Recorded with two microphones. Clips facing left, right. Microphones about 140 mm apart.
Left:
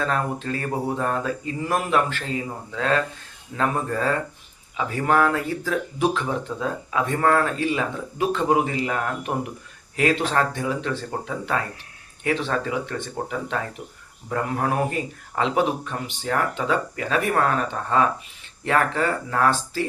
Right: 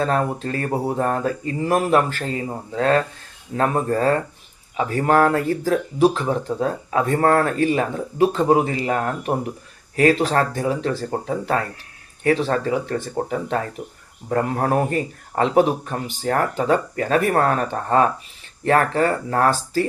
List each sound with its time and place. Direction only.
0.0 s speech: 35° right (ahead or behind)